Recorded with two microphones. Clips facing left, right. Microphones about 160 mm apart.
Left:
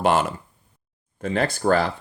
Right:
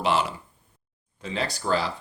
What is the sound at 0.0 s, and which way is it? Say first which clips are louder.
Speech: left 4 dB; 50° left (ahead or behind).